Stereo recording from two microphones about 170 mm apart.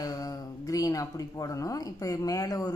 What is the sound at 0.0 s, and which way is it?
Speech, 20° left (ahead or behind).